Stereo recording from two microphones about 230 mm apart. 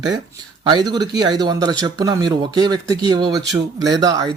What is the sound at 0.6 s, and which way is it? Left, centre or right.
A man's voice, centre.